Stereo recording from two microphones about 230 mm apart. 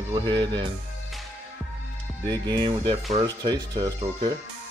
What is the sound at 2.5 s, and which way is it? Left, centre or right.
Speech, centre.